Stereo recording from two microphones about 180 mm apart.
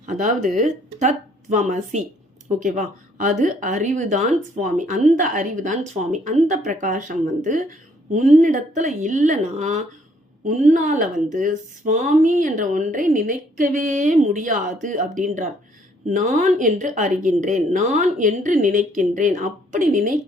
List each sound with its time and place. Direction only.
0.0 s a woman's voice: 45° right (ahead or behind)